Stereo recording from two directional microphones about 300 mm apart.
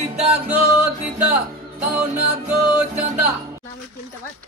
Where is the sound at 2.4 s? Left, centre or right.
Centre.